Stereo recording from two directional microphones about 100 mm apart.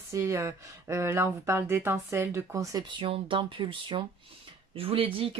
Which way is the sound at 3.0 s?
60° right (ahead or behind).